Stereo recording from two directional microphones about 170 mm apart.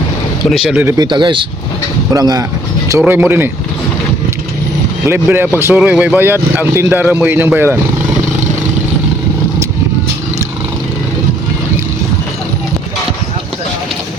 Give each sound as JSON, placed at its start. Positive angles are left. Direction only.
{"t": 0.5, "sound": "speech", "side_deg": -5}
{"t": 0.9, "sound": "speech", "side_deg": -25}
{"t": 3.0, "sound": "speech", "side_deg": -10}
{"t": 5.0, "sound": "speech", "side_deg": -15}